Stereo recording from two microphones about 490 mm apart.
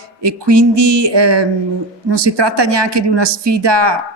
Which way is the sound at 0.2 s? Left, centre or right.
Right.